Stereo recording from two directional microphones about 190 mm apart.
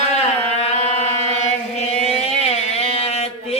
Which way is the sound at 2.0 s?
35° left (ahead or behind).